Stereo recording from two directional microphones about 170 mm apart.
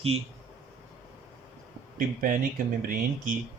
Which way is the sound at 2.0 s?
55° right (ahead or behind).